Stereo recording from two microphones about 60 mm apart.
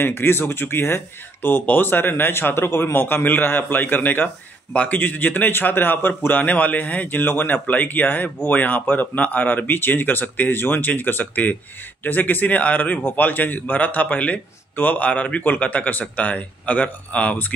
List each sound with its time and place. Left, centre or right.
0.0 s a man's voice: left